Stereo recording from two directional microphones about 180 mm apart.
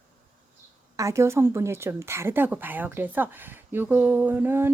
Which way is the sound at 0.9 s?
15° right (ahead or behind).